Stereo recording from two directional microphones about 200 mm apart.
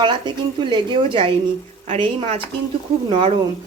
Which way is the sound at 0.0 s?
25° right (ahead or behind).